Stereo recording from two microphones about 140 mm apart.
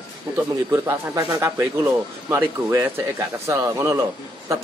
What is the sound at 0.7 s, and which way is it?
Speech, 20° right (ahead or behind).